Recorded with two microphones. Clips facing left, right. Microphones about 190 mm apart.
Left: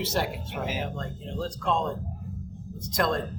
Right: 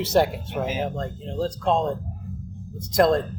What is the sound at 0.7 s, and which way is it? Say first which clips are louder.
Speech: right 5 dB; 30° right (ahead or behind).